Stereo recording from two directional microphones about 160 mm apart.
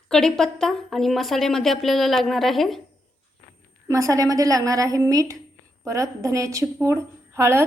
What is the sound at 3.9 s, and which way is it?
A woman's voice, 20° right (ahead or behind).